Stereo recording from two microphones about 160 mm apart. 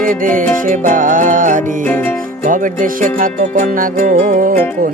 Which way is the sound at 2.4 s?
55° right (ahead or behind).